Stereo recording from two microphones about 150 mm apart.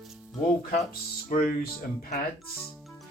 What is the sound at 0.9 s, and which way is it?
Speech, 75° left (ahead or behind).